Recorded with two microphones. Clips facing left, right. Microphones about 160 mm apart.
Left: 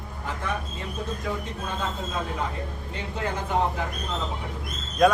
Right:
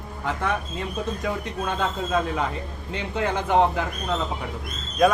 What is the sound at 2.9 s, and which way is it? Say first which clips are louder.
Speech: right 5 dB; 75° right (ahead or behind).